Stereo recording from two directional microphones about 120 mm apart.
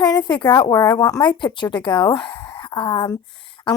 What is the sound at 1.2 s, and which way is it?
A woman's voice, 40° left (ahead or behind).